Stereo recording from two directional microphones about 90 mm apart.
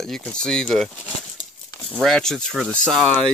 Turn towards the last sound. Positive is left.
turn(degrees=5)  # may be behind; listen again after turning